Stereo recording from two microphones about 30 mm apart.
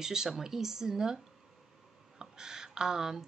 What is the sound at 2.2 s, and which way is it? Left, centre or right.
Speech, centre.